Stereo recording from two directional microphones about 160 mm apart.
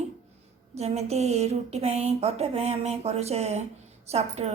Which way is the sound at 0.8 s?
40° right (ahead or behind).